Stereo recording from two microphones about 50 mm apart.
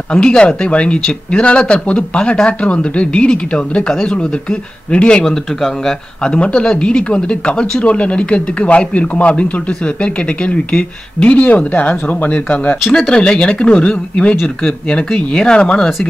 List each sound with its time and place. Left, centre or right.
0.1 s speech: centre
5.2 s speech: centre
6.2 s speech: left
12.9 s speech: centre